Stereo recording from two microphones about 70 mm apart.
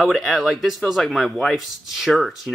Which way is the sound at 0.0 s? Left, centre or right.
Centre.